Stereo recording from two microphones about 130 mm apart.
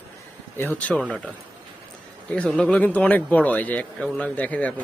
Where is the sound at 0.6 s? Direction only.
10° left (ahead or behind).